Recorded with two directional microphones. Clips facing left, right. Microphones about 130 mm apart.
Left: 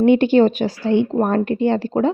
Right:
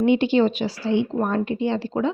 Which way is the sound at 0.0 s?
50° left (ahead or behind).